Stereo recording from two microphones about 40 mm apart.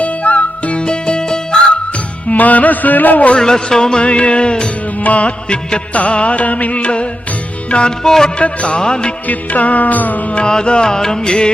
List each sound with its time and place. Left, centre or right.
0.0 s music: left; by 1.6 s centre
2.3 s music: left
3.3 s music: centre
4.9 s music: left; by 8.3 s centre
8.4 s music: left
9.2 s music: left
10.4 s music: left